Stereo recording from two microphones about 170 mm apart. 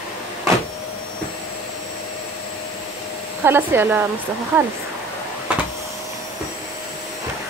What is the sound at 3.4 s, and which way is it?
Speech, 15° right (ahead or behind).